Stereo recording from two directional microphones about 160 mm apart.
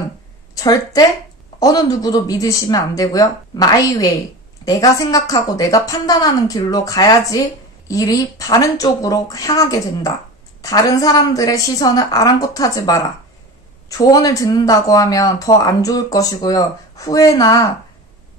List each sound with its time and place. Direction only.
0.6 s speech: 25° left (ahead or behind)